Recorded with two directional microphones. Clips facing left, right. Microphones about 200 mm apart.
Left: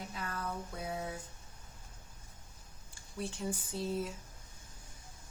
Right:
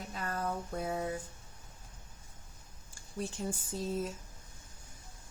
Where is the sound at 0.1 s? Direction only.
45° right (ahead or behind).